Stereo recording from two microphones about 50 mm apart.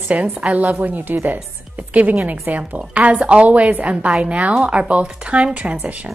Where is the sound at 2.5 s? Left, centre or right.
Right.